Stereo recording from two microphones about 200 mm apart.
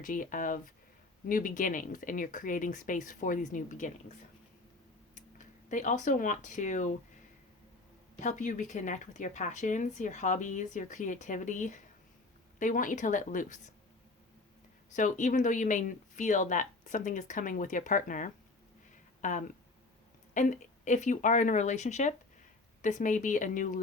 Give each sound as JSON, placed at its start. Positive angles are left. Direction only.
{"t": 0.0, "sound": "speech", "side_deg": 40}
{"t": 5.6, "sound": "speech", "side_deg": 40}
{"t": 8.2, "sound": "speech", "side_deg": 40}
{"t": 14.9, "sound": "speech", "side_deg": 40}